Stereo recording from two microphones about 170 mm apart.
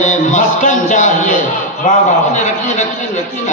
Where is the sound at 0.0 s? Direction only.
45° left (ahead or behind).